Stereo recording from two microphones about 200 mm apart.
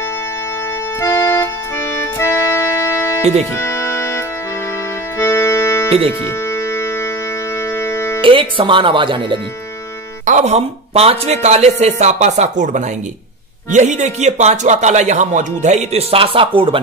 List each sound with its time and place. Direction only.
1.0 s music: 10° left (ahead or behind)
5.2 s accordion: 10° left (ahead or behind)
7.8 s music: 10° left (ahead or behind)
8.2 s speech: 25° right (ahead or behind)
10.2 s speech: 35° right (ahead or behind)